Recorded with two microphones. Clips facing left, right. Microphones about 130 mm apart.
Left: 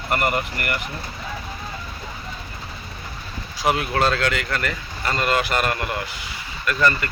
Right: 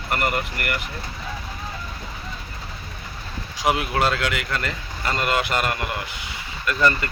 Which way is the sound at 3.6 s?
15° right (ahead or behind).